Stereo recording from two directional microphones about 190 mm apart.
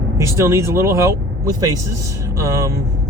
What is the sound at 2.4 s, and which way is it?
Speech, 15° right (ahead or behind).